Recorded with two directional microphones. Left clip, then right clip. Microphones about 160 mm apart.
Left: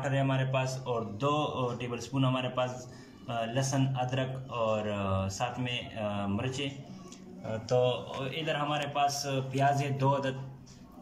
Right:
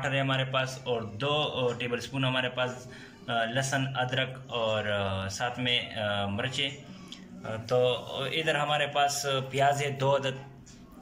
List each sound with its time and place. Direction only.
0.0 s a man's voice: 5° left (ahead or behind)